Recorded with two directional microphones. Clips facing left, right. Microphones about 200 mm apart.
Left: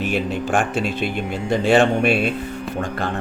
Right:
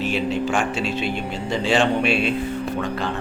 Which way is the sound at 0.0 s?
55° left (ahead or behind).